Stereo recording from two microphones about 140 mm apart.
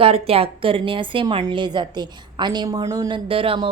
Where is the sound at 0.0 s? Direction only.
45° right (ahead or behind); by 3.2 s 25° right (ahead or behind).